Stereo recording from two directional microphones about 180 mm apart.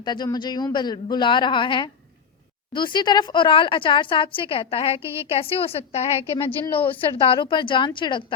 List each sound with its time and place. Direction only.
0.0 s a woman's voice: 25° left (ahead or behind)